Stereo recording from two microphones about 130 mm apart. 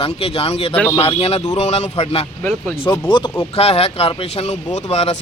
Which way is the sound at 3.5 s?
50° left (ahead or behind).